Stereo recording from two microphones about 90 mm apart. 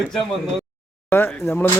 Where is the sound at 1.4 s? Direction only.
25° left (ahead or behind).